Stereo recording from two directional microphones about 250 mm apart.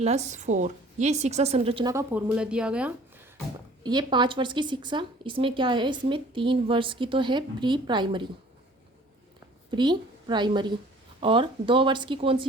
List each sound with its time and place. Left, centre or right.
0.0 s speech: right; by 2.9 s centre
3.8 s speech: centre
9.7 s a woman's voice: centre